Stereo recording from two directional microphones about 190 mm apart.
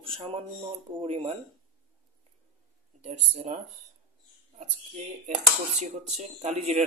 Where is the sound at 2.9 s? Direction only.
30° right (ahead or behind).